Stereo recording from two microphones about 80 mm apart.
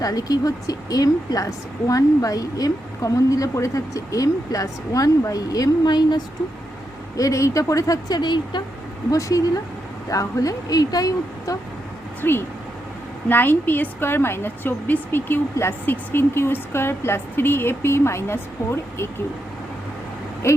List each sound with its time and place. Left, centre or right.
0.0 s a woman's voice: left
7.2 s a woman's voice: left
9.0 s a woman's voice: left
12.2 s a woman's voice: left
20.4 s speech: left